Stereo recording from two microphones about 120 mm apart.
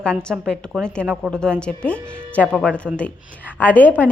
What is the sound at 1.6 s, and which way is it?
Speech, 10° left (ahead or behind).